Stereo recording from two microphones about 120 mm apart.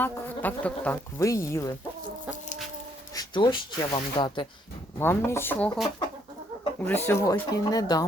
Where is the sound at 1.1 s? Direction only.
25° left (ahead or behind).